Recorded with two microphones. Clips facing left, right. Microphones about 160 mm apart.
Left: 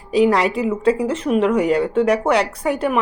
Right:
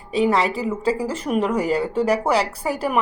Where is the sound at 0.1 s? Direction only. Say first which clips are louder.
Left 4 dB; centre (ahead or behind).